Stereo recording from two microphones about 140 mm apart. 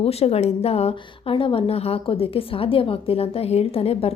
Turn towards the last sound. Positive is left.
turn(degrees=45)  # may be behind; listen again after turning